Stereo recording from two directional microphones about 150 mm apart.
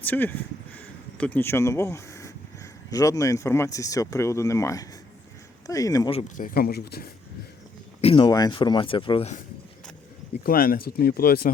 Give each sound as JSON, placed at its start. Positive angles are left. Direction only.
{"t": 0.0, "sound": "speech", "side_deg": 10}
{"t": 6.1, "sound": "speech", "side_deg": 40}
{"t": 6.3, "sound": "speech", "side_deg": 75}
{"t": 8.0, "sound": "speech", "side_deg": 35}
{"t": 8.3, "sound": "speech", "side_deg": 25}
{"t": 10.4, "sound": "speech", "side_deg": 75}